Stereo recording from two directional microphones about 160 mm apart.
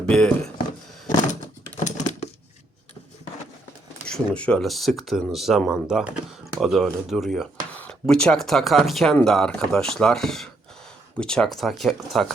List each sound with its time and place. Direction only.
0.1 s speech: 5° left (ahead or behind)
1.0 s typing: 50° left (ahead or behind)
4.0 s speech: 5° left (ahead or behind)